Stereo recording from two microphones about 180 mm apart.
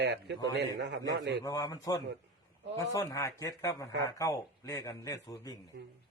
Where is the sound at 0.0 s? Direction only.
75° right (ahead or behind).